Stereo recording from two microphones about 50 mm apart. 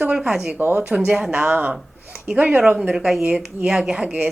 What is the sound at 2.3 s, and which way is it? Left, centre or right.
Speech, right.